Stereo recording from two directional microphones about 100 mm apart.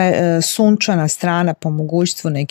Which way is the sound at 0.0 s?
45° left (ahead or behind).